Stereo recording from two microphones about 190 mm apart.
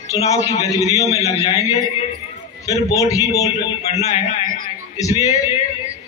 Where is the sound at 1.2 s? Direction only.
35° left (ahead or behind).